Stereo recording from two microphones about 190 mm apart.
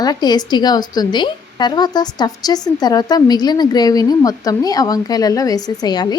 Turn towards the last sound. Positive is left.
turn(degrees=20)  # may be behind; listen again after turning